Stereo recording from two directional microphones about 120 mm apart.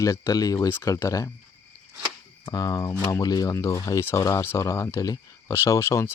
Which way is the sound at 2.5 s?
30° left (ahead or behind).